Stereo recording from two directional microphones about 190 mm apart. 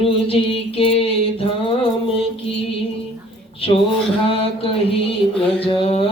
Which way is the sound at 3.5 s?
30° left (ahead or behind).